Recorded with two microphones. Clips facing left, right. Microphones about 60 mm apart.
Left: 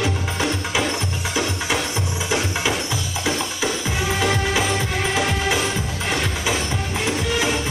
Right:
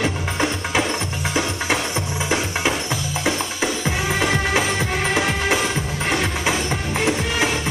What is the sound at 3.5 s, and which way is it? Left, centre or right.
Music, right.